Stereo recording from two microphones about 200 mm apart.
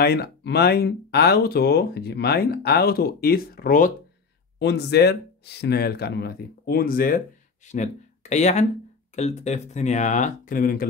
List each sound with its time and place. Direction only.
0.0 s speech: 55° left (ahead or behind)
4.6 s speech: 55° left (ahead or behind)
7.6 s speech: 35° left (ahead or behind)